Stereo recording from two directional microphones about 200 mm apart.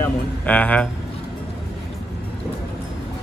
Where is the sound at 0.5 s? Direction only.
10° left (ahead or behind).